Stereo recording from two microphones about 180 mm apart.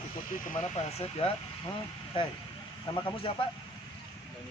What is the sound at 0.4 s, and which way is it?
Speech, 40° left (ahead or behind).